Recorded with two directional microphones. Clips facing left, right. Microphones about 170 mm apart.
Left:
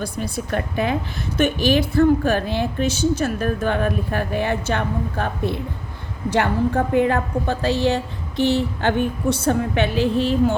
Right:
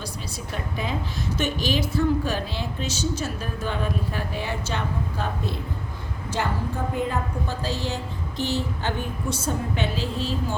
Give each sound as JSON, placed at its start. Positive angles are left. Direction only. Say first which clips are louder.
{"t": 0.0, "sound": "a woman's voice", "louder": "left 8 dB", "side_deg": 55}